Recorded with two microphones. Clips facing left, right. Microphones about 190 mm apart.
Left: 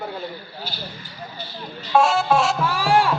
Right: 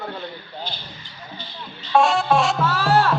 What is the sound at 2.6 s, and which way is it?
Speech, 10° left (ahead or behind).